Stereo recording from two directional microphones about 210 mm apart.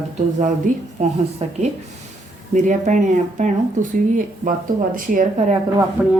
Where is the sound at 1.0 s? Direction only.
35° right (ahead or behind).